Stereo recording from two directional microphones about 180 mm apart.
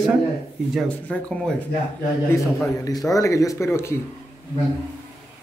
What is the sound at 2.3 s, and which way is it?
Speech, 15° left (ahead or behind).